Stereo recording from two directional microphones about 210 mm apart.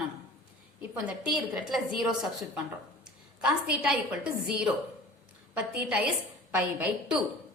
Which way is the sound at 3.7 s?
5° right (ahead or behind).